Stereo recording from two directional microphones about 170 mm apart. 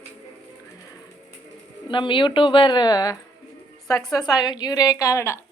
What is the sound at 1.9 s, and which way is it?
A woman's voice, 30° left (ahead or behind).